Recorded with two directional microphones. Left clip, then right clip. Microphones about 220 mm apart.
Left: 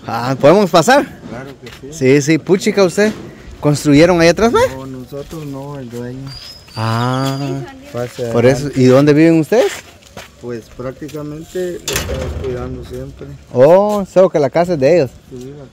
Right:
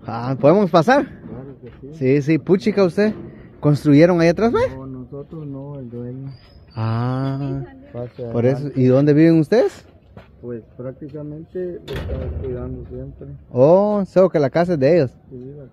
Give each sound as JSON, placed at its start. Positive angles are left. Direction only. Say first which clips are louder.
{"t": 0.0, "sound": "speech", "louder": "left 5 dB", "side_deg": 15}
{"t": 1.9, "sound": "speech", "louder": "left 6 dB", "side_deg": 25}
{"t": 5.5, "sound": "speech", "louder": "left 6 dB", "side_deg": 35}
{"t": 6.7, "sound": "speech", "louder": "left 8 dB", "side_deg": 20}
{"t": 10.8, "sound": "speech", "louder": "left 6 dB", "side_deg": 35}
{"t": 13.5, "sound": "speech", "louder": "left 5 dB", "side_deg": 10}